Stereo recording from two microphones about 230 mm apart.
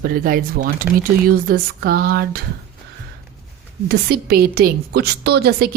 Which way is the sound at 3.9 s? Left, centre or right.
Right.